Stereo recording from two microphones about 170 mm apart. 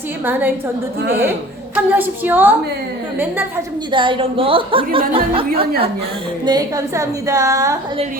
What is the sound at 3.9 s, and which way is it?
A woman's voice, 30° right (ahead or behind).